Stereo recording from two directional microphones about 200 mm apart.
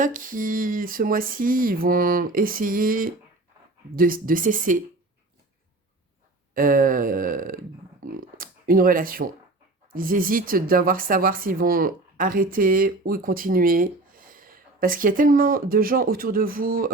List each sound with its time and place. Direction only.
0.0 s speech: 40° right (ahead or behind)
6.5 s speech: 45° right (ahead or behind)
8.0 s a sound: 45° right (ahead or behind)
9.9 s speech: 45° right (ahead or behind)